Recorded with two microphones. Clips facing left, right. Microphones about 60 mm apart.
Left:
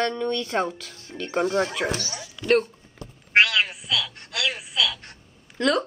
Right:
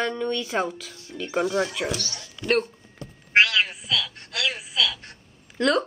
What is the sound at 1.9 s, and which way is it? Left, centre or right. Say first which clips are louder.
Speech: left 2 dB; centre.